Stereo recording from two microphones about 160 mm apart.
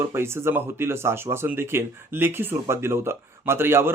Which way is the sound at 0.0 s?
15° right (ahead or behind).